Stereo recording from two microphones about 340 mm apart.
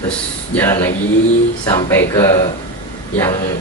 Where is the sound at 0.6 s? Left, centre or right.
Centre.